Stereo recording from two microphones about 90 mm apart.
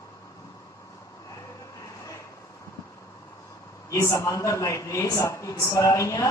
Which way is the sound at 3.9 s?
35° left (ahead or behind).